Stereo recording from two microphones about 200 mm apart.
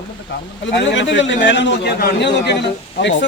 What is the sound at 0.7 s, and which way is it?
A man's voice, 65° left (ahead or behind).